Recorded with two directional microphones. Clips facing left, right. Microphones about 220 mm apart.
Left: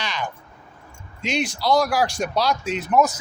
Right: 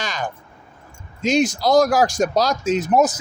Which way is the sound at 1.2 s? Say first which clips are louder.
Right 7 dB; 45° right (ahead or behind).